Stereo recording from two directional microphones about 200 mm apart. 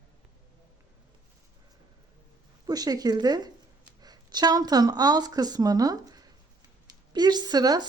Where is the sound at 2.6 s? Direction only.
20° right (ahead or behind).